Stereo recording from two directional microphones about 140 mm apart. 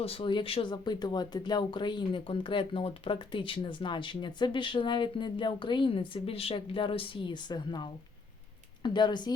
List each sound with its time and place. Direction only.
0.0 s speech: 40° left (ahead or behind)